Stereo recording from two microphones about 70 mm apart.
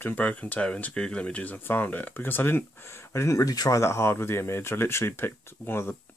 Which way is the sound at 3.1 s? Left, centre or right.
Left.